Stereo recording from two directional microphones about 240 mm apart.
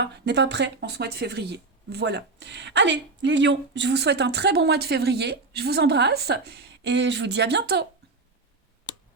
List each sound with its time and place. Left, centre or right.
0.0 s speech: right